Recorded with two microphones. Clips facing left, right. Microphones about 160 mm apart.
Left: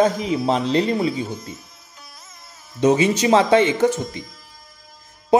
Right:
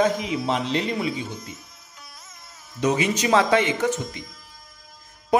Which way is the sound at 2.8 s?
30° left (ahead or behind).